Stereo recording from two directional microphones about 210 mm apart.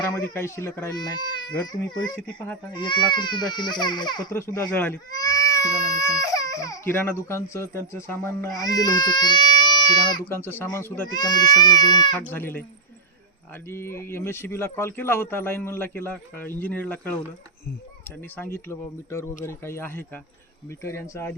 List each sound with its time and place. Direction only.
0.0 s speech: 10° left (ahead or behind)
2.0 s speech: 5° left (ahead or behind)
2.7 s speech: 20° left (ahead or behind)
13.7 s speech: 10° left (ahead or behind)
18.3 s speech: 10° left (ahead or behind)